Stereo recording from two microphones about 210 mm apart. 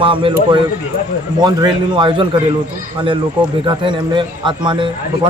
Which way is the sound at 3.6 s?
20° right (ahead or behind).